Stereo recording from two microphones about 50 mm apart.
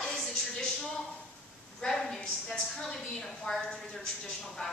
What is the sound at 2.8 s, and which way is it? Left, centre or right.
A woman's voice, centre.